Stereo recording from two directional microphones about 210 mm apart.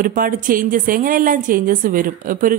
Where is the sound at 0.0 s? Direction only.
40° right (ahead or behind).